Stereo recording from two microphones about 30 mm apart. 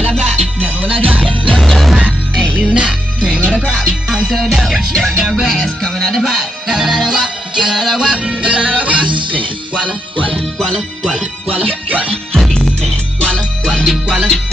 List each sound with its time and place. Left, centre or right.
0.0 s music: left
0.8 s music: right
1.6 s music: centre
2.6 s music: right
3.7 s music: centre
4.9 s music: centre
5.2 s music: centre
5.6 s speech: centre
6.7 s music: centre
8.3 s music: right
10.6 s speech: centre
11.6 s music: left
14.0 s music: right